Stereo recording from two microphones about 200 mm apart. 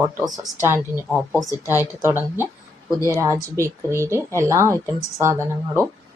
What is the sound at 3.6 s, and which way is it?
Speech, 15° right (ahead or behind).